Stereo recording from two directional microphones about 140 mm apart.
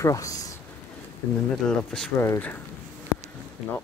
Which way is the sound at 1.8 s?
5° left (ahead or behind).